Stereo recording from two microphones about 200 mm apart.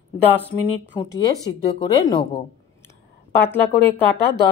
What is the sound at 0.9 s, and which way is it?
A woman's voice, 15° left (ahead or behind).